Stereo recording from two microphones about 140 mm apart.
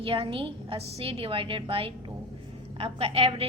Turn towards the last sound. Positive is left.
turn(degrees=-45)  # may be behind; listen again after turning